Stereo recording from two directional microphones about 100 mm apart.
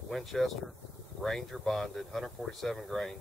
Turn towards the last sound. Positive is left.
turn(degrees=0)  # may be behind; listen again after turning